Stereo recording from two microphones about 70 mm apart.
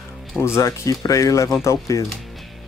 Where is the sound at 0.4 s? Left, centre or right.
Left.